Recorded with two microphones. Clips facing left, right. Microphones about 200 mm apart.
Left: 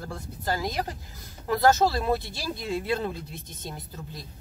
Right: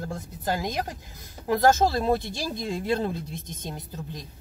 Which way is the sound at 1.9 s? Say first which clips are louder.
Right 2 dB; 50° right (ahead or behind).